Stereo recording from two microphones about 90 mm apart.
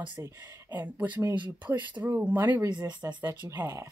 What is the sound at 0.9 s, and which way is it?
Speech, 15° right (ahead or behind).